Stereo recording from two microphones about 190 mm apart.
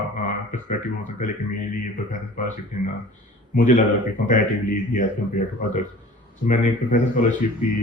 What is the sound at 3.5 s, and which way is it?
Speech, 40° left (ahead or behind).